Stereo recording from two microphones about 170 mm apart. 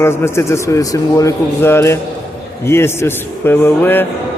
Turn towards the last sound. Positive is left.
turn(degrees=10)  # may be behind; listen again after turning